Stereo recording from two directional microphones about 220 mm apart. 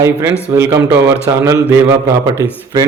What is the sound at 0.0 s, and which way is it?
A man's voice, 15° right (ahead or behind).